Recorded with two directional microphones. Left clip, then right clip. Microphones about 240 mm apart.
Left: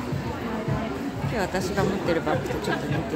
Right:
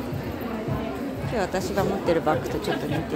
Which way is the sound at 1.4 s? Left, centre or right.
Centre.